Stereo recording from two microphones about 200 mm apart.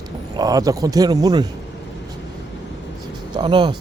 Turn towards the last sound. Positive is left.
turn(degrees=-25)  # may be behind; listen again after turning